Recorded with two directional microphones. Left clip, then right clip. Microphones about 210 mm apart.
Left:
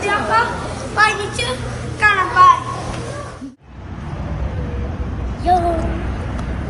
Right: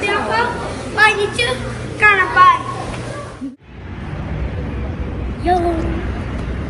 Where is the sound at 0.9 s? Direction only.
25° left (ahead or behind).